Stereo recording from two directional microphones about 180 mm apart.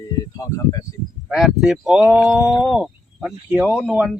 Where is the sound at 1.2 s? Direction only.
Centre (ahead or behind).